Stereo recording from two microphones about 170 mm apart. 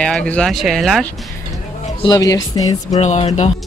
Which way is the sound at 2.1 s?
20° left (ahead or behind).